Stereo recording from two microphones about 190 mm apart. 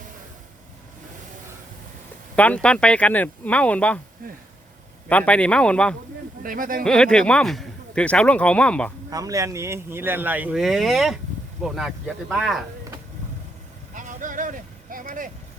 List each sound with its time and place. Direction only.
2.3 s speech: 5° left (ahead or behind)
5.0 s a man's voice: 5° left (ahead or behind)
6.4 s speech: 45° right (ahead or behind)
6.8 s a man's voice: 5° left (ahead or behind)
9.0 s a man's voice: 20° right (ahead or behind); by 12.6 s centre (ahead or behind)
13.9 s vehicle: 45° right (ahead or behind)